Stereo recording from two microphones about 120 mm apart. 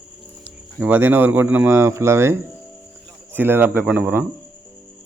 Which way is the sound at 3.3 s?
15° right (ahead or behind).